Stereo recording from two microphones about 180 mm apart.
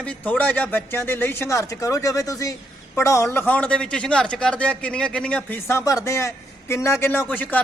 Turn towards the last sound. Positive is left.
turn(degrees=10)  # may be behind; listen again after turning